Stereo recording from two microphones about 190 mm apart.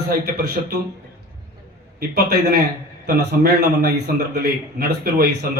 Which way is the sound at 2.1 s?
55° right (ahead or behind).